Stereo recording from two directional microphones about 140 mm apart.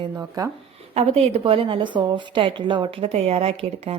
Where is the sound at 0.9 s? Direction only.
50° right (ahead or behind).